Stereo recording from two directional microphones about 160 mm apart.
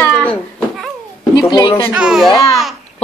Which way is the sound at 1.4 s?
30° left (ahead or behind).